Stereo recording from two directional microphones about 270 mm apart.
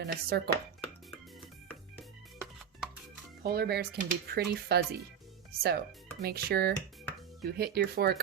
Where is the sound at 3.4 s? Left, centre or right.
Right.